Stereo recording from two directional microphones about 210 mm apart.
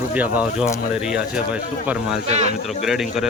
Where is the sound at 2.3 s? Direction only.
30° right (ahead or behind).